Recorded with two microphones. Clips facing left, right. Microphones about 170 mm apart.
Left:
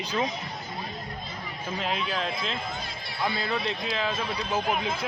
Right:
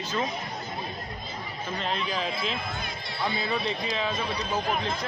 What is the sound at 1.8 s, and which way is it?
A man's voice, 5° left (ahead or behind).